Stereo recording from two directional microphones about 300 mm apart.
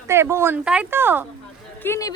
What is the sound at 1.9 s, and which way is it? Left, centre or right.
Speech, centre.